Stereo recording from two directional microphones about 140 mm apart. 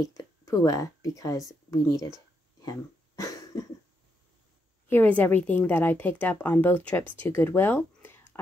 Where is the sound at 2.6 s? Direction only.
25° left (ahead or behind).